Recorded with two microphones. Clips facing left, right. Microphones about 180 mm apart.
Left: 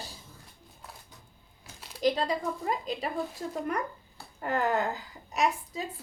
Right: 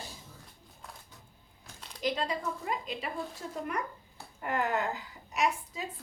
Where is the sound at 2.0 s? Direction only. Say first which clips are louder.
Left 5 dB; 40° left (ahead or behind).